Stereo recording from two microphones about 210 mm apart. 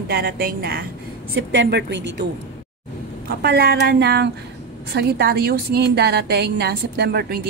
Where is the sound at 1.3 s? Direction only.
60° right (ahead or behind).